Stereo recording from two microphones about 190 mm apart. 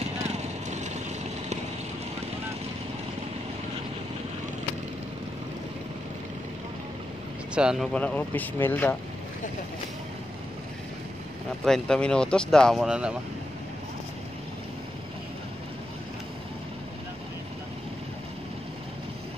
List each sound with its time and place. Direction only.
0.4 s vehicle: 35° right (ahead or behind)
7.5 s speech: 5° right (ahead or behind)
11.6 s speech: 5° left (ahead or behind)